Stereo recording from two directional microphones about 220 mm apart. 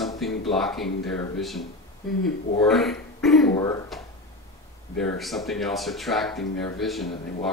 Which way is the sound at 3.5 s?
15° left (ahead or behind).